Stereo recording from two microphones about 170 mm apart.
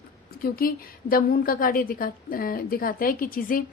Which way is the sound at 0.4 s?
60° left (ahead or behind).